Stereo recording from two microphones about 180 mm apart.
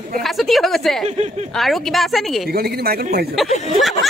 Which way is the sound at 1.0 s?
35° right (ahead or behind).